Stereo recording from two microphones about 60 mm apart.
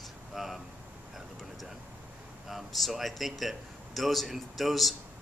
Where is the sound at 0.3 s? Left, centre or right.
Centre.